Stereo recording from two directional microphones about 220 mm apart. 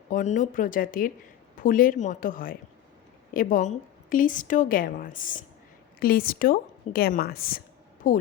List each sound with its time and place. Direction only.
0.1 s a woman's voice: 35° left (ahead or behind)